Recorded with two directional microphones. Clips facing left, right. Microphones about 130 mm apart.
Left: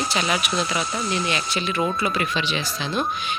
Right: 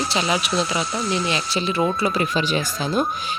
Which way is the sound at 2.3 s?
40° right (ahead or behind).